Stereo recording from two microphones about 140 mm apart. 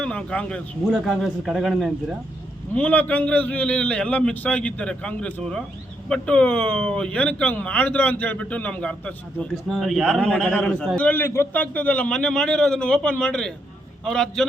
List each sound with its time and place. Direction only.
0.0 s a man's voice: 5° left (ahead or behind)